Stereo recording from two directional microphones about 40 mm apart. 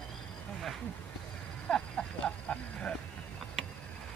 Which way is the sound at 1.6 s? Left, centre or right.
Centre.